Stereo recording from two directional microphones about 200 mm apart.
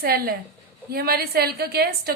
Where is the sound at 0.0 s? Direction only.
50° right (ahead or behind).